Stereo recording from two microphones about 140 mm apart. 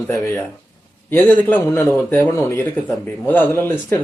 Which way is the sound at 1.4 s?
15° left (ahead or behind).